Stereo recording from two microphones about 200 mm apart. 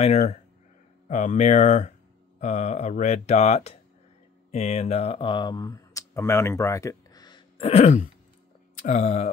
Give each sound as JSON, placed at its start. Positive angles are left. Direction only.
{"t": 0.0, "sound": "speech", "side_deg": 30}